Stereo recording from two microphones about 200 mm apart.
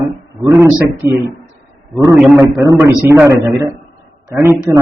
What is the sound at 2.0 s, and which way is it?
A man's voice, 15° right (ahead or behind).